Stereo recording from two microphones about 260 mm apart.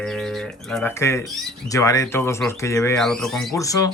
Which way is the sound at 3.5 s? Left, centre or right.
Centre.